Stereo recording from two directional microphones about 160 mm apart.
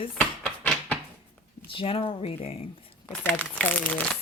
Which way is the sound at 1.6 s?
35° left (ahead or behind).